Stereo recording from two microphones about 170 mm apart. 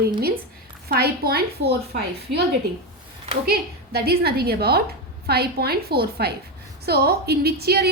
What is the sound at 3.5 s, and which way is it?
A woman's voice, 65° right (ahead or behind).